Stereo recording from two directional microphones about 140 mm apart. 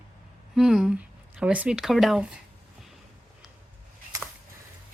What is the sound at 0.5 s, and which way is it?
Speech, 5° right (ahead or behind).